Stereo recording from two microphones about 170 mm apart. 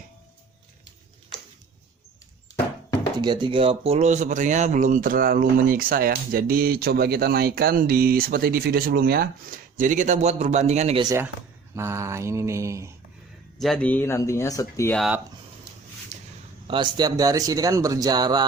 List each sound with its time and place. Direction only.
3.2 s speech: 25° right (ahead or behind)
11.0 s mantra: 20° right (ahead or behind)
13.6 s speech: 5° left (ahead or behind)
14.9 s speech: centre (ahead or behind)
16.1 s a sound: 40° right (ahead or behind)
16.6 s speech: 30° right (ahead or behind)